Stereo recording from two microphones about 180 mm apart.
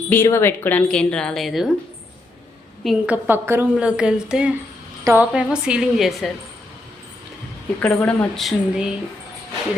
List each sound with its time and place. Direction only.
0.1 s speech: 15° left (ahead or behind)
2.8 s speech: centre (ahead or behind)
3.2 s speech: 10° right (ahead or behind)
7.8 s a woman's voice: 10° left (ahead or behind)